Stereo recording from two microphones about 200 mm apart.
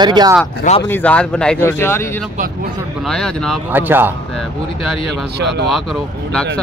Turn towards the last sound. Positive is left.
turn(degrees=0)  # may be behind; listen again after turning